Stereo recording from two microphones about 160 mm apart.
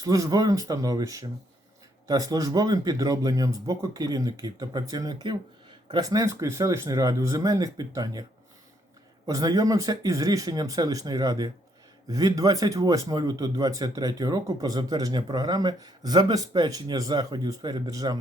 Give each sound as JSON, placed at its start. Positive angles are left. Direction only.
{"t": 0.0, "sound": "speech", "side_deg": -20}
{"t": 9.2, "sound": "speech", "side_deg": -20}